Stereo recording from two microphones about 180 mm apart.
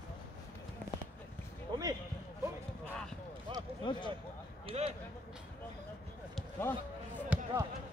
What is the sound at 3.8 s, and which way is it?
Speech, 25° left (ahead or behind).